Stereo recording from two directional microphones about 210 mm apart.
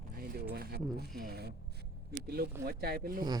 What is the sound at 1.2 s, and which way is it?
Speech, 50° right (ahead or behind).